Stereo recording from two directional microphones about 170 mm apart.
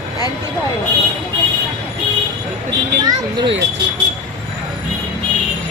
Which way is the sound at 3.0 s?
25° right (ahead or behind).